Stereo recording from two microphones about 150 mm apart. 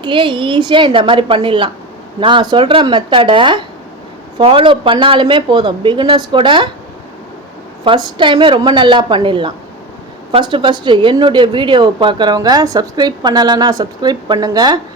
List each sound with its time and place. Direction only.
0.0 s speech: 30° right (ahead or behind)
7.9 s a woman's voice: 35° right (ahead or behind)